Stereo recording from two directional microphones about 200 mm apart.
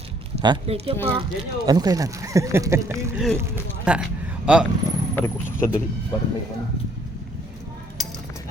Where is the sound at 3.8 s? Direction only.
5° right (ahead or behind).